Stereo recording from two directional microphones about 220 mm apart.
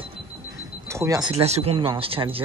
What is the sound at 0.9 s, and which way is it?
Speech, 15° right (ahead or behind).